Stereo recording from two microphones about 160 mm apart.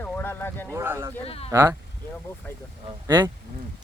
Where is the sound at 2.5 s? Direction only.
10° left (ahead or behind).